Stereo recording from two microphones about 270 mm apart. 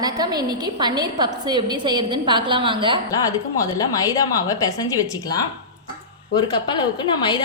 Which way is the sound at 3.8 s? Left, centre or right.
Centre.